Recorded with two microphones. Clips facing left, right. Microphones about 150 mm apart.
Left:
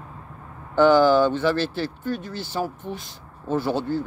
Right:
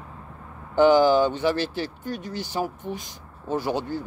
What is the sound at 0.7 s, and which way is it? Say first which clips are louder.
Speech: left 1 dB; 15° right (ahead or behind).